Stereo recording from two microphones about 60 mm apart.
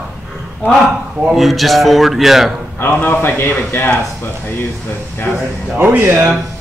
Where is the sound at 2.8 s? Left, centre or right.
Left.